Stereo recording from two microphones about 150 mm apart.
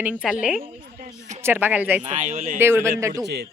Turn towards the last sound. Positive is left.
turn(degrees=-20)  # may be behind; listen again after turning